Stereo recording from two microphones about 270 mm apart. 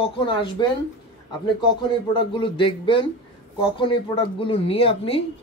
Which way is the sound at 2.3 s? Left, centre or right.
Centre.